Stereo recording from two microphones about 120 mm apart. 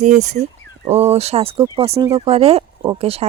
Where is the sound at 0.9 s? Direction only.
55° right (ahead or behind).